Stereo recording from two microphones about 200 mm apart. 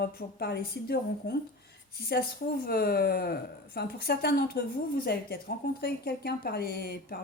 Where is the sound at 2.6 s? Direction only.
50° left (ahead or behind).